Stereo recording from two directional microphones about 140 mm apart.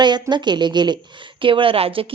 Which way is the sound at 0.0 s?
30° right (ahead or behind).